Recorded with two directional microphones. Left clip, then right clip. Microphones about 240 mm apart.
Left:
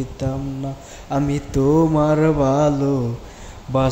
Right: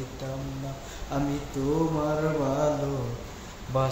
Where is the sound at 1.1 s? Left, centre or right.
Left.